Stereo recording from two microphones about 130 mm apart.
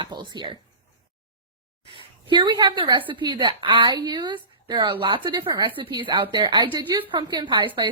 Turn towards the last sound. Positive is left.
turn(degrees=-35)  # may be behind; listen again after turning